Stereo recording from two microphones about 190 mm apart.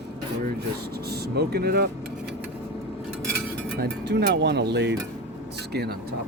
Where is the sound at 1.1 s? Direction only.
55° right (ahead or behind).